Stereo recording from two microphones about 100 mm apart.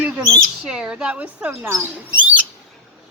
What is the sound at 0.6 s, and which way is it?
Speech, 10° right (ahead or behind).